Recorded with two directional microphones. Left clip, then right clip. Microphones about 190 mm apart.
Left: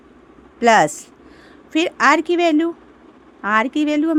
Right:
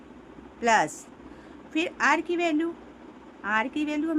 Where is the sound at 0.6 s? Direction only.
55° left (ahead or behind).